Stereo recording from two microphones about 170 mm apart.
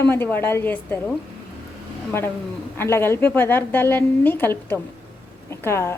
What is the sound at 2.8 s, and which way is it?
A woman's voice, 15° left (ahead or behind).